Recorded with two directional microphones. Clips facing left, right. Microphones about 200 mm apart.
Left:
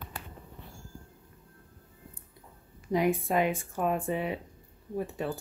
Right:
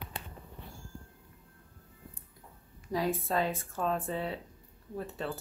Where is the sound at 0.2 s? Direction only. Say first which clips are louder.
Left 1 dB; 20° right (ahead or behind).